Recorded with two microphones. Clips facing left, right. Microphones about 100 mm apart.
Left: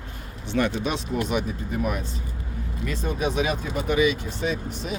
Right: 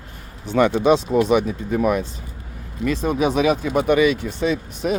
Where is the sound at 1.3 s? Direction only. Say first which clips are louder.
Right 8 dB; 90° right.